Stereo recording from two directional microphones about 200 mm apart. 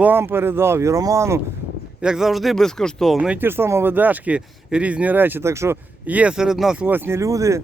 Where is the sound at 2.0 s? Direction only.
5° right (ahead or behind).